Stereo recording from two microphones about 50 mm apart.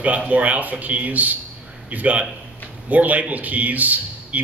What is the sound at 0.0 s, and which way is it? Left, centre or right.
A man's voice, right.